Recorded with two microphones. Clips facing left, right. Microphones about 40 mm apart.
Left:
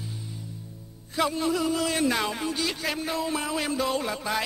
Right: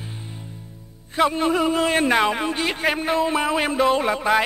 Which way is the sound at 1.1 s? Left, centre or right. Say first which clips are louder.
Right 6 dB; right.